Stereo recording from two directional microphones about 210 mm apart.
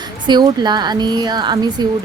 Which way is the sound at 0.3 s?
20° right (ahead or behind).